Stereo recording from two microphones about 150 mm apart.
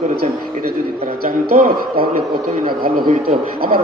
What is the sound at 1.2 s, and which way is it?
A man's voice, 80° right.